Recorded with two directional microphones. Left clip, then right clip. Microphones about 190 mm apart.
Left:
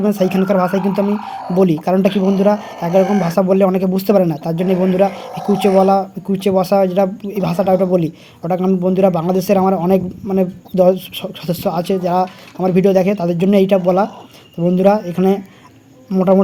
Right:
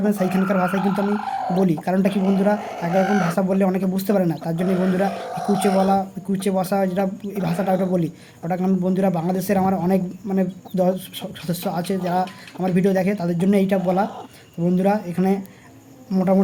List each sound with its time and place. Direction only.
0.0 s a man's voice: 35° left (ahead or behind)
1.8 s a man's voice: 35° left (ahead or behind)
3.0 s speech: 10° right (ahead or behind)
3.2 s a man's voice: 35° left (ahead or behind)
5.2 s speech: 5° right (ahead or behind)
5.6 s a man's voice: 40° left (ahead or behind)
16.1 s insect: 30° left (ahead or behind)